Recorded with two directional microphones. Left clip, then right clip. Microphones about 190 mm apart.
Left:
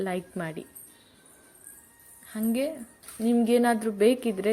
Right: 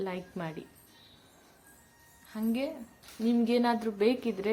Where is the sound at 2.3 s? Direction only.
20° left (ahead or behind).